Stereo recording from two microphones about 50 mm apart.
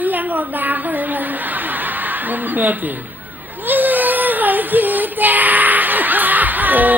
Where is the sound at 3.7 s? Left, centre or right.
Right.